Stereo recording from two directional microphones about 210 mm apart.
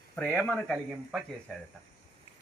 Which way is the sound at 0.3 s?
5° left (ahead or behind).